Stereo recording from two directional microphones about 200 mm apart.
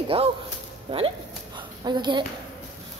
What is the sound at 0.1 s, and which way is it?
Speech, 30° right (ahead or behind).